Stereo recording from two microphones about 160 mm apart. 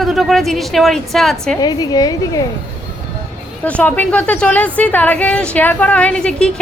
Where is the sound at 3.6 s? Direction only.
10° left (ahead or behind).